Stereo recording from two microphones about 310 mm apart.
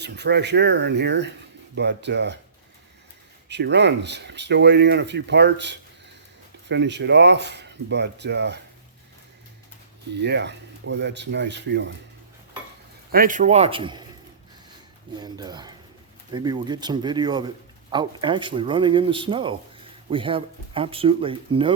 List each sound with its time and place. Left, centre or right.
0.0 s speech: right
3.5 s speech: right
10.2 s speech: right
13.1 s a man's voice: right
15.2 s speech: centre